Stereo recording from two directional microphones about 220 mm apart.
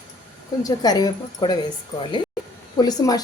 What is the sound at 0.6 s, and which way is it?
Speech, 15° left (ahead or behind).